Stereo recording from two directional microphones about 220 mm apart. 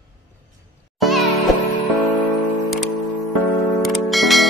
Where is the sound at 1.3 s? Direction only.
30° left (ahead or behind).